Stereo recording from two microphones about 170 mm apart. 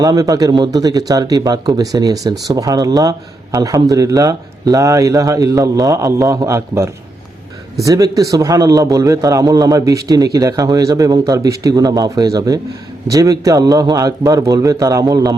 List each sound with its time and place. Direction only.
0.0 s a man's voice: 20° right (ahead or behind)